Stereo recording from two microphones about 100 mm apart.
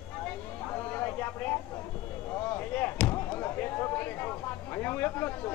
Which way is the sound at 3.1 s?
20° left (ahead or behind).